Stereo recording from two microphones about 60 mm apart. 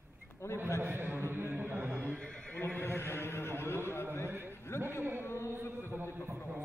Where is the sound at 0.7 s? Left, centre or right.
Right.